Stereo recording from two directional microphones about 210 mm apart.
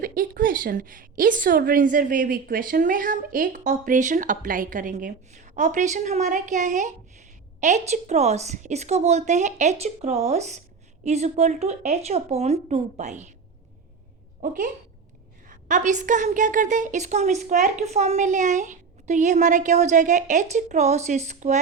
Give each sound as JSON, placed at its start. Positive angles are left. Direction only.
{"t": 0.0, "sound": "a woman's voice", "side_deg": -40}
{"t": 14.4, "sound": "a woman's voice", "side_deg": -40}